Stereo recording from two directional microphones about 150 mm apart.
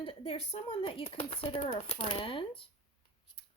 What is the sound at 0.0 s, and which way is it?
A woman's voice, 40° left (ahead or behind).